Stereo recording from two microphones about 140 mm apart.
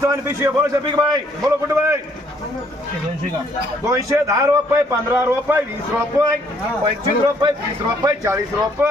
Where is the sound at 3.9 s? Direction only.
20° right (ahead or behind).